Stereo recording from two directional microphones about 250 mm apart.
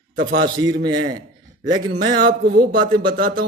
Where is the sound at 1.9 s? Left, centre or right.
Right.